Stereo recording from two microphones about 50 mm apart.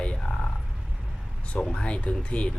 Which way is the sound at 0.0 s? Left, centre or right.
Centre.